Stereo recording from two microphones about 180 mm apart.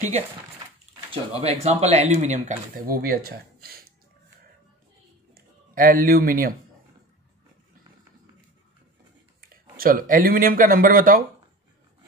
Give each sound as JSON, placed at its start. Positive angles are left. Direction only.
{"t": 1.1, "sound": "speech", "side_deg": -35}
{"t": 5.3, "sound": "a sound", "side_deg": -55}
{"t": 9.4, "sound": "speech", "side_deg": -55}